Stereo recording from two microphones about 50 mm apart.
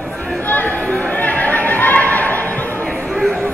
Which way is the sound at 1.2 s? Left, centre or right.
Left.